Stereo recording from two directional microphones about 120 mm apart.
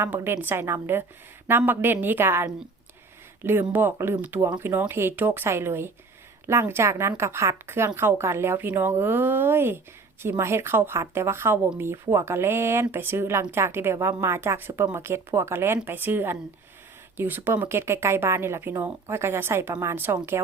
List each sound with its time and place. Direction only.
0.0 s speech: 20° right (ahead or behind)